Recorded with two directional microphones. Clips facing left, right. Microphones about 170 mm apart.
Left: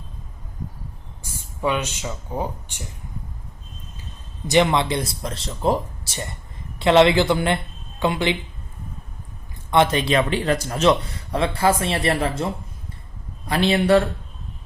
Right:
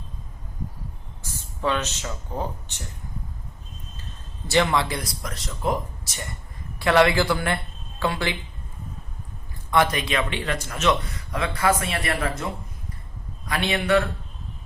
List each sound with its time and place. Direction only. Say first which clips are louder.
1.6 s speech: left 2 dB; 10° left (ahead or behind)
4.4 s a man's voice: left 4 dB; 20° left (ahead or behind)
9.6 s a man's voice: left 4 dB; 25° left (ahead or behind)
13.5 s a man's voice: left 5 dB; 35° left (ahead or behind)